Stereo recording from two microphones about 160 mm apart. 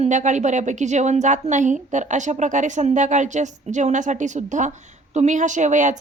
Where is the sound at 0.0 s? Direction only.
50° right (ahead or behind).